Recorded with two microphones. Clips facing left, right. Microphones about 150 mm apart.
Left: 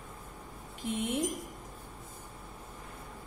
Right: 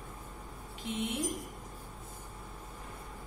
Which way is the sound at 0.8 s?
45° left (ahead or behind).